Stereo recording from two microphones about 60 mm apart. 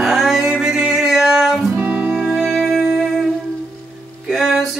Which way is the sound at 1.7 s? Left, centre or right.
Right.